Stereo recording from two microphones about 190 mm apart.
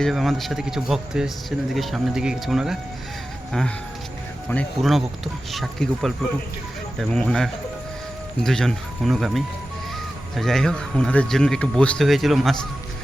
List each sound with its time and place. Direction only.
0.0 s speech: centre (ahead or behind)
4.4 s speech: 5° left (ahead or behind)